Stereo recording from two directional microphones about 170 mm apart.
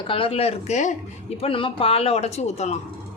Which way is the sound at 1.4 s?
30° left (ahead or behind).